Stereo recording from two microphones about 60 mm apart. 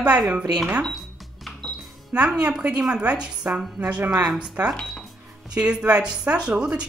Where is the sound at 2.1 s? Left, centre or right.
Centre.